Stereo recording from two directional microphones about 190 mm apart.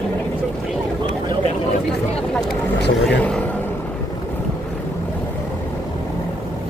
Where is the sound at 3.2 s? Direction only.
5° left (ahead or behind).